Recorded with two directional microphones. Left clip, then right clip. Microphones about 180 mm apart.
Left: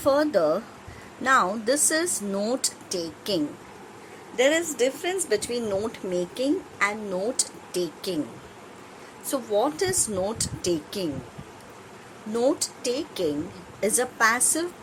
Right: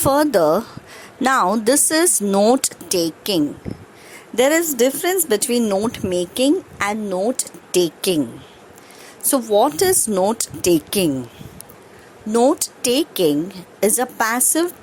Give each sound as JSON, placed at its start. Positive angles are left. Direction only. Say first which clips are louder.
{"t": 0.0, "sound": "speech", "louder": "right 6 dB", "side_deg": -55}
{"t": 9.3, "sound": "speech", "louder": "right 9 dB", "side_deg": -50}
{"t": 12.3, "sound": "speech", "louder": "right 8 dB", "side_deg": -40}